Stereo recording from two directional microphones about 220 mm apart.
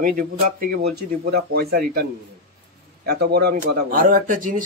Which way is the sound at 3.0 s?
45° right (ahead or behind).